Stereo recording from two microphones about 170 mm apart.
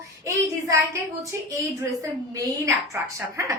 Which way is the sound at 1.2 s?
20° right (ahead or behind).